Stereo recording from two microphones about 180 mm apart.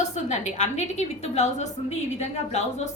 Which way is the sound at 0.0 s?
40° left (ahead or behind).